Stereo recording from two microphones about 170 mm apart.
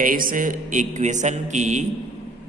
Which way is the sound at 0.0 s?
55° right (ahead or behind).